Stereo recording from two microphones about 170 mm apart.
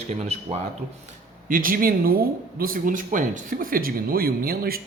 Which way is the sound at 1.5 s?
55° right (ahead or behind).